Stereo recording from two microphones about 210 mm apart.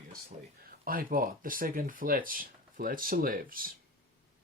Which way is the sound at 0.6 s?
45° right (ahead or behind).